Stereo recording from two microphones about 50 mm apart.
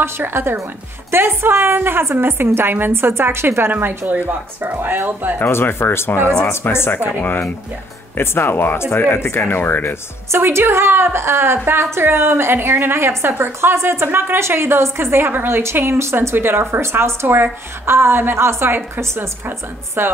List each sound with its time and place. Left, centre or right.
0.0 s a woman's voice: right
3.7 s speech: right
5.4 s speech: left
10.4 s a woman's voice: right
16.3 s a woman's voice: right
17.0 s a woman's voice: right
20.0 s a woman's voice: right